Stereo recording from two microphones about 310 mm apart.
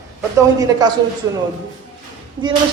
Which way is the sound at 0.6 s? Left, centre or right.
Centre.